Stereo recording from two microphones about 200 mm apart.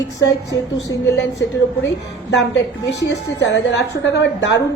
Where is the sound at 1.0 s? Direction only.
60° left (ahead or behind).